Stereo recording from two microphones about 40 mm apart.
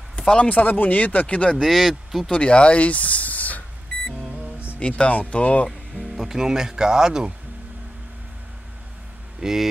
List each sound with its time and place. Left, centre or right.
0.4 s speech: left
1.2 s speech: left
1.6 s speech: centre
2.3 s speech: left
4.7 s speech: left
6.0 s speech: centre
9.4 s speech: centre